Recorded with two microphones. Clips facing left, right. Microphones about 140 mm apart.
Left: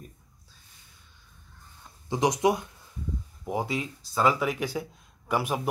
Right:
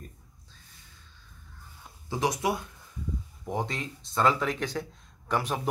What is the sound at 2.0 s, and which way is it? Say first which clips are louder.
Speech: left 4 dB; 15° left (ahead or behind).